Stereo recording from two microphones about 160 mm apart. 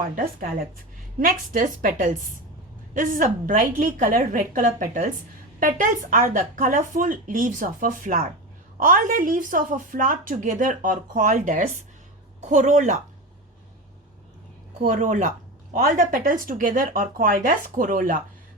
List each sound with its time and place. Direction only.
1.2 s a woman's voice: 55° right (ahead or behind)
14.8 s speech: 50° right (ahead or behind)